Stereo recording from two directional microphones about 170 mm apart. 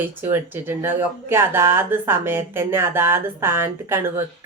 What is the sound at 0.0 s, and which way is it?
A woman's voice, 10° right (ahead or behind).